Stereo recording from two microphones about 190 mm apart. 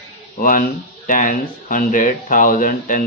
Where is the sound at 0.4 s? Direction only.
45° left (ahead or behind).